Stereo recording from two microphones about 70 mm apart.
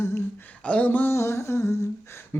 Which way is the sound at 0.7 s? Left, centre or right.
Centre.